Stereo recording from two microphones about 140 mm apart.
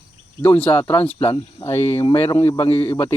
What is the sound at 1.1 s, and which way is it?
Mantra, 35° left (ahead or behind).